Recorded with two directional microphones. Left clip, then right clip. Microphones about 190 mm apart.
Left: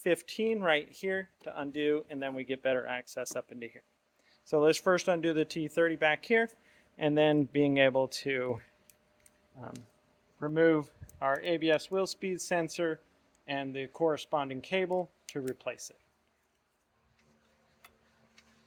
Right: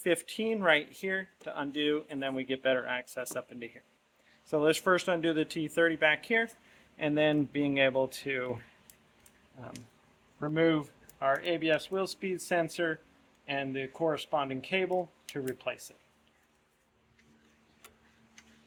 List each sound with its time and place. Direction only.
0.0 s speech: 35° left (ahead or behind)
10.4 s speech: 35° left (ahead or behind); by 16.0 s 50° left (ahead or behind)